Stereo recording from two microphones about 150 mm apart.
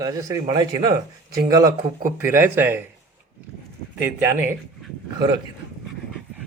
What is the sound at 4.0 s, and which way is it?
Speech, 15° right (ahead or behind).